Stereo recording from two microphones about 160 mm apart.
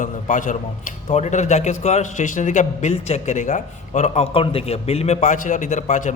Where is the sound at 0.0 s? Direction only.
55° left (ahead or behind).